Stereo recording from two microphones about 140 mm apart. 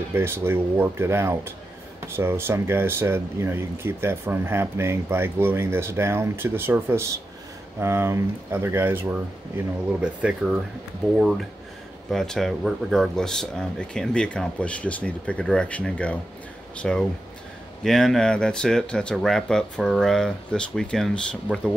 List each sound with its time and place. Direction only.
0.1 s speech: 15° right (ahead or behind); by 21.7 s 5° left (ahead or behind)